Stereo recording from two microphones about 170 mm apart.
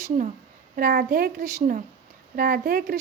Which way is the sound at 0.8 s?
60° right (ahead or behind).